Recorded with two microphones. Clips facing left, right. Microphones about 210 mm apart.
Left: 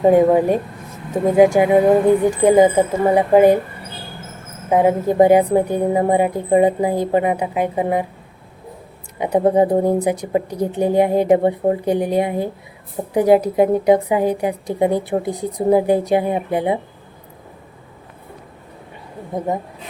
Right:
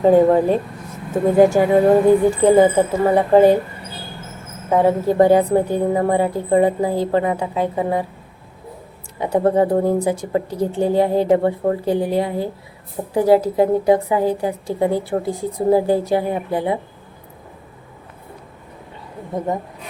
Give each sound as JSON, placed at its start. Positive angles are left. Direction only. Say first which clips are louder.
{"t": 0.0, "sound": "a woman's voice", "louder": "even", "side_deg": 15}
{"t": 4.7, "sound": "a woman's voice", "louder": "even", "side_deg": 15}
{"t": 9.2, "sound": "a woman's voice", "louder": "left 1 dB", "side_deg": 15}